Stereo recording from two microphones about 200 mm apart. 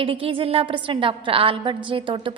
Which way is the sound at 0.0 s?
25° right (ahead or behind).